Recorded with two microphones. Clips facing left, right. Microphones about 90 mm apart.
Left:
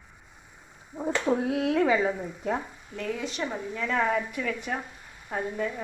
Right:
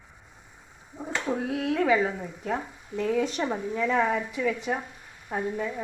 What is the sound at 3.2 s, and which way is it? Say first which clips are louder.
Speech: right 5 dB; 45° right (ahead or behind).